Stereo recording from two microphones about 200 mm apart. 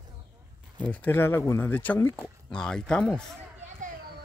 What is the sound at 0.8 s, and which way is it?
Speech, 10° left (ahead or behind).